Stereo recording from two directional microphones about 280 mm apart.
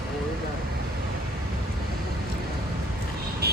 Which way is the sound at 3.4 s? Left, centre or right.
Right.